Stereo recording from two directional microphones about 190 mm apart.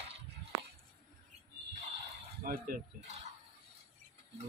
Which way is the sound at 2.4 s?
50° right (ahead or behind).